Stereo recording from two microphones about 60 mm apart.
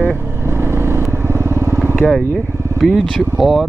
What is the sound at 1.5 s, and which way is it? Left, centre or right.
Vehicle, right.